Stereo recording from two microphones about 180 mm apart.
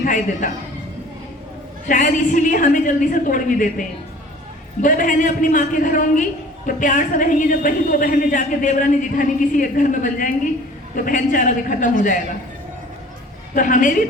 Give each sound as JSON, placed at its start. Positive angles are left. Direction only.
{"t": 0.0, "sound": "a woman's voice", "side_deg": 45}
{"t": 1.9, "sound": "a woman's voice", "side_deg": 45}
{"t": 13.5, "sound": "a woman's voice", "side_deg": 45}